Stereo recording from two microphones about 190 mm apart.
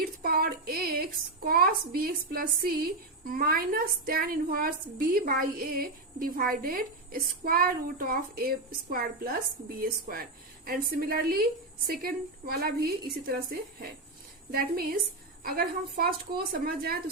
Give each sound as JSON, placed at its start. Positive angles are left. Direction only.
{"t": 0.0, "sound": "a woman's voice", "side_deg": -50}
{"t": 14.5, "sound": "a woman's voice", "side_deg": -50}